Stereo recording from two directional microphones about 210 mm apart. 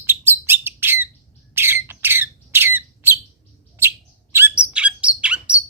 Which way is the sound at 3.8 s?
10° right (ahead or behind).